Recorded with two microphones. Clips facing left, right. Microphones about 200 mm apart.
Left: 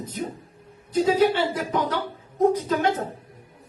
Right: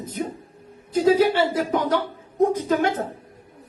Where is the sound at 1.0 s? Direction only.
45° right (ahead or behind).